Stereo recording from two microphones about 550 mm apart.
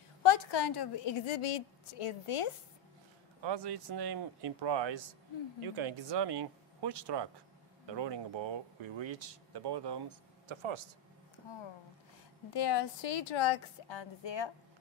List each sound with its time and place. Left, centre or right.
0.2 s a woman's voice: left
3.4 s speech: right
12.5 s a woman's voice: left